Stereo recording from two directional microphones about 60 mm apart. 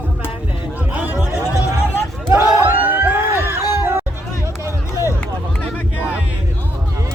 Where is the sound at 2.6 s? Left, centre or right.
Right.